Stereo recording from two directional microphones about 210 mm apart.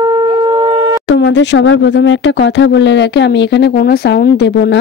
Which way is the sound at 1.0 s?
60° left (ahead or behind).